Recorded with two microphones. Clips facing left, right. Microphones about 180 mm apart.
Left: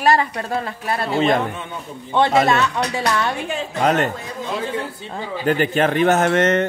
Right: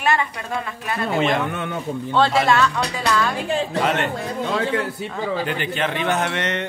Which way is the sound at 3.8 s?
40° left (ahead or behind).